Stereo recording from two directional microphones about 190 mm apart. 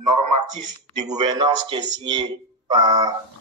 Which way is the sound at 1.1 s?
25° right (ahead or behind).